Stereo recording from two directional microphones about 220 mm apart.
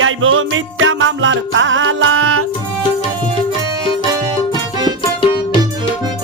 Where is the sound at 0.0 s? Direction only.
65° right (ahead or behind).